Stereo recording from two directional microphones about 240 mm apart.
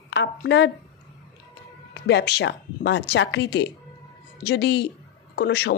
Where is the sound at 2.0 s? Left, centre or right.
Left.